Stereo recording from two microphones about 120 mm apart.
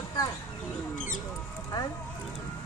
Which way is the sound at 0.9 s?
90° left.